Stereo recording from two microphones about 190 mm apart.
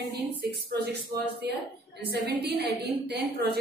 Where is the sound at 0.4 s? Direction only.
55° right (ahead or behind).